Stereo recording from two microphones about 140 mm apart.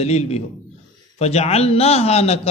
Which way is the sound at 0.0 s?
50° left (ahead or behind).